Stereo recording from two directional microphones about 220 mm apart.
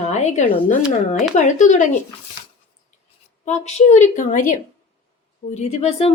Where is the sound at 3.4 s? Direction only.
30° left (ahead or behind).